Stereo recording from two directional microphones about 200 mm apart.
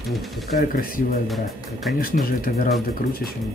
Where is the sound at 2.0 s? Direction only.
45° left (ahead or behind).